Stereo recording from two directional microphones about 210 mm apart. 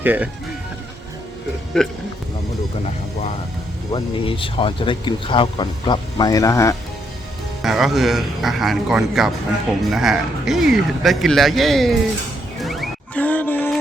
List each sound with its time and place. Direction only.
0.0 s speech: 10° right (ahead or behind)
1.7 s speech: 5° left (ahead or behind)
3.9 s speech: 25° left (ahead or behind)
7.6 s speech: centre (ahead or behind)
12.5 s music: centre (ahead or behind)